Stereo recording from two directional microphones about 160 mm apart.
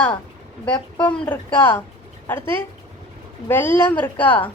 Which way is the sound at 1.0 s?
10° left (ahead or behind).